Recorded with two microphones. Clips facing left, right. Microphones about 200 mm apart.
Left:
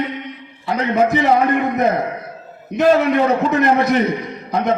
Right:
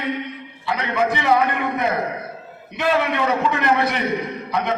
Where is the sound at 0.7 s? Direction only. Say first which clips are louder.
Left 5 dB; 45° left (ahead or behind).